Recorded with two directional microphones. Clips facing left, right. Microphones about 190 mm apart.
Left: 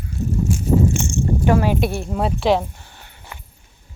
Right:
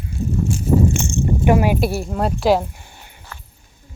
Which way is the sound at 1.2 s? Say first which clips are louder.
Right 2 dB; 15° right (ahead or behind).